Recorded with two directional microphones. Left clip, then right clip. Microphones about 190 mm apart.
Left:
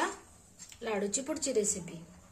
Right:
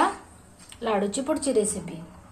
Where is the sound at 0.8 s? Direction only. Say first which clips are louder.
Right 8 dB; 30° left (ahead or behind).